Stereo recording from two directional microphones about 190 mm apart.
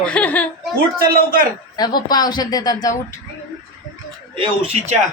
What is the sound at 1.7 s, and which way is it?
A woman's voice, 20° left (ahead or behind).